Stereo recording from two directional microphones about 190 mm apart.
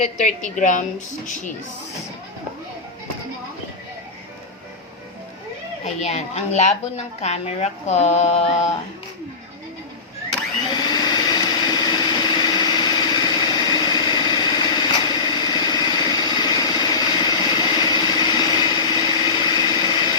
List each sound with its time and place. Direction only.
0.0 s a woman's voice: 40° left (ahead or behind)
5.8 s a woman's voice: 35° left (ahead or behind)
10.7 s light engine: 20° left (ahead or behind)